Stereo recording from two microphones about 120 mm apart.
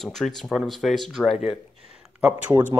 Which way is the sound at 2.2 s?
15° right (ahead or behind).